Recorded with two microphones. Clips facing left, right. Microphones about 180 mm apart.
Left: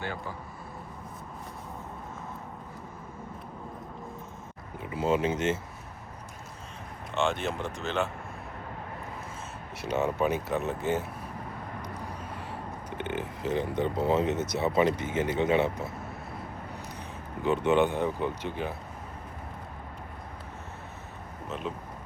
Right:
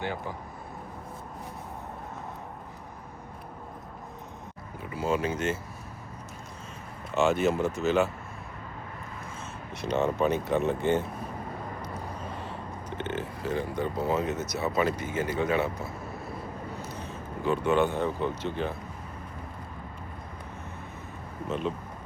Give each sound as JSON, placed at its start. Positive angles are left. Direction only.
{"t": 4.8, "sound": "speech", "side_deg": 20}
{"t": 7.1, "sound": "speech", "side_deg": -5}
{"t": 9.8, "sound": "speech", "side_deg": 10}
{"t": 13.0, "sound": "speech", "side_deg": 15}
{"t": 17.4, "sound": "speech", "side_deg": 20}
{"t": 21.5, "sound": "speech", "side_deg": 0}